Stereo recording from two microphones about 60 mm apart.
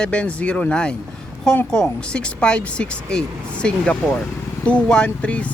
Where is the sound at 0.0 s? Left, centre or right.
Centre.